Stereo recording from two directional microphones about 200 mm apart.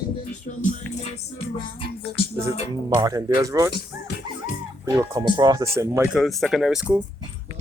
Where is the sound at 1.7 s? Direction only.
30° left (ahead or behind).